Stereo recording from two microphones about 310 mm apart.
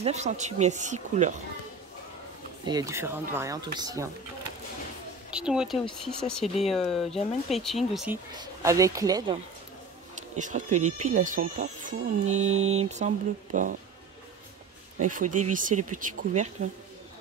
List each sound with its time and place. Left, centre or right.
0.0 s speech: right
2.6 s speech: centre
5.3 s speech: centre
10.3 s speech: right
12.4 s mantra: right
12.7 s speech: right
15.0 s speech: right